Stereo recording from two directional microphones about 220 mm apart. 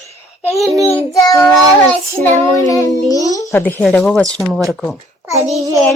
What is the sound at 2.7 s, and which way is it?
A child's voice, 15° left (ahead or behind).